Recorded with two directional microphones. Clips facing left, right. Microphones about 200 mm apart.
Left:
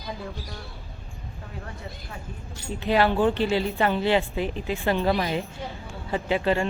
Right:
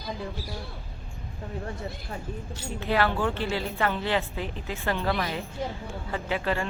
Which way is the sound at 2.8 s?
20° left (ahead or behind).